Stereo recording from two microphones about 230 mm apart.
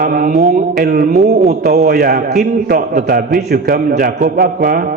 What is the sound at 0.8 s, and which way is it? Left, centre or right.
Speech, right.